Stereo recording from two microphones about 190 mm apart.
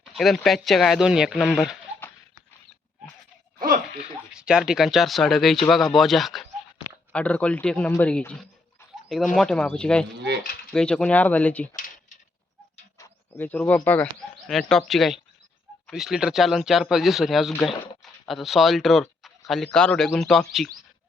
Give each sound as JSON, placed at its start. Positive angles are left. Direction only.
{"t": 0.2, "sound": "speech", "side_deg": 0}
{"t": 4.3, "sound": "a man's voice", "side_deg": -5}
{"t": 8.8, "sound": "a sound", "side_deg": 15}
{"t": 9.3, "sound": "speech", "side_deg": 0}
{"t": 10.2, "sound": "speech", "side_deg": -65}
{"t": 10.7, "sound": "a man's voice", "side_deg": 5}
{"t": 13.0, "sound": "speech", "side_deg": 10}